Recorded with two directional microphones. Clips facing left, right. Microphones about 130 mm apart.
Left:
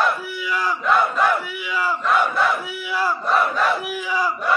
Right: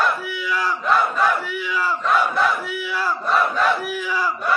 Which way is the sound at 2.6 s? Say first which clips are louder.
Left 1 dB; 10° left (ahead or behind).